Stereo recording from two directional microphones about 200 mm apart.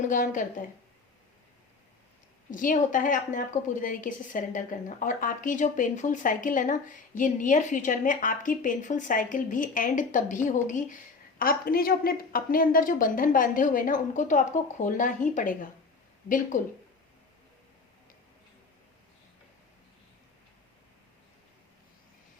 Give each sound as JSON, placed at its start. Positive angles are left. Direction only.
{"t": 0.0, "sound": "a woman's voice", "side_deg": 40}
{"t": 2.5, "sound": "a woman's voice", "side_deg": 40}
{"t": 16.5, "sound": "a woman's voice", "side_deg": 40}